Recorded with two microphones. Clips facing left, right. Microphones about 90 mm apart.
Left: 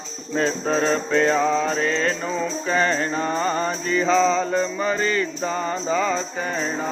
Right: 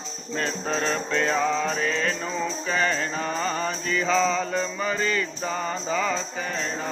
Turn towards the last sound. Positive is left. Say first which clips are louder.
# left 4 dB
turn(degrees=15)  # may be behind; listen again after turning